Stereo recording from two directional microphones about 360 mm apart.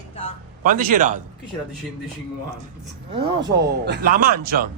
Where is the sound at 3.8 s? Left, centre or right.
Right.